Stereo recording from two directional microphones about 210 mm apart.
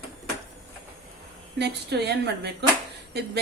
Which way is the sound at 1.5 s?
50° right (ahead or behind).